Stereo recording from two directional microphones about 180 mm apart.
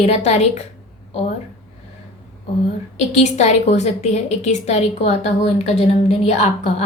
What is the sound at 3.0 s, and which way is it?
A woman's voice, 40° left (ahead or behind).